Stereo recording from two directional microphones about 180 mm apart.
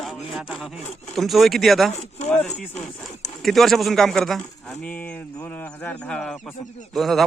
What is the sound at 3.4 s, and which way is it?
A man's voice, centre (ahead or behind).